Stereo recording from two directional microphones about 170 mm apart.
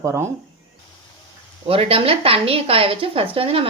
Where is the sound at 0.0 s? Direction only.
15° right (ahead or behind).